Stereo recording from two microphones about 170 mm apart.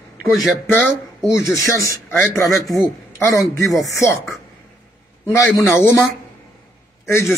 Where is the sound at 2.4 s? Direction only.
Centre (ahead or behind).